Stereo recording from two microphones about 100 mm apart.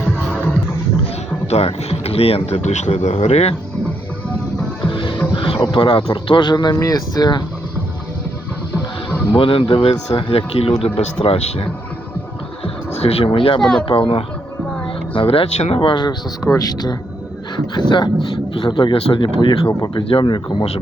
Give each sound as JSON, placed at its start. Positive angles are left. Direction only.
{"t": 1.5, "sound": "speech", "side_deg": 90}
{"t": 4.9, "sound": "music", "side_deg": 55}
{"t": 5.3, "sound": "a sound", "side_deg": 60}
{"t": 5.7, "sound": "speech", "side_deg": 60}
{"t": 9.3, "sound": "speech", "side_deg": 65}
{"t": 10.2, "sound": "speech", "side_deg": 75}
{"t": 12.6, "sound": "music", "side_deg": 85}
{"t": 13.6, "sound": "speech", "side_deg": 5}
{"t": 13.8, "sound": "speech", "side_deg": 60}
{"t": 15.8, "sound": "speech", "side_deg": 50}
{"t": 17.7, "sound": "speech", "side_deg": 50}